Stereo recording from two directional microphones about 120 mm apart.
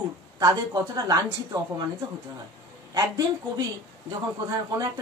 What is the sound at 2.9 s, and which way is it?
Speech, 30° right (ahead or behind).